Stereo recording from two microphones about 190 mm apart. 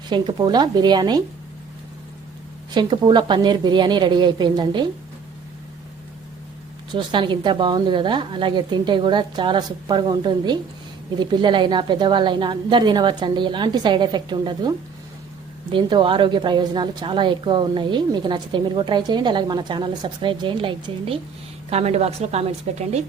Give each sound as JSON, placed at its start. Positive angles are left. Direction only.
{"t": 0.1, "sound": "a woman's voice", "side_deg": -20}
{"t": 2.7, "sound": "a woman's voice", "side_deg": -25}
{"t": 6.9, "sound": "a woman's voice", "side_deg": -25}
{"t": 15.7, "sound": "a woman's voice", "side_deg": -25}